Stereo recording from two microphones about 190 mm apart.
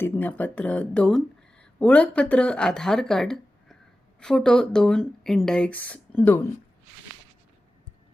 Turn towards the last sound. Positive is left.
turn(degrees=10)  # may be behind; listen again after turning